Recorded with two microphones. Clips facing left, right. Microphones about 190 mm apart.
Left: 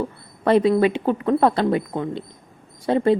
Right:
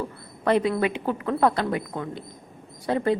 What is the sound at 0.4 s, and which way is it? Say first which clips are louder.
A woman's voice: left 6 dB; 30° left (ahead or behind).